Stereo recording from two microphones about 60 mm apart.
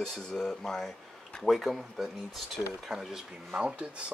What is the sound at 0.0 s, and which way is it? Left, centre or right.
Speech, centre.